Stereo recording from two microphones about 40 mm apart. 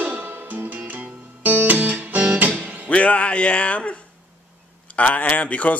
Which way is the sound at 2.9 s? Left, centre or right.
Left.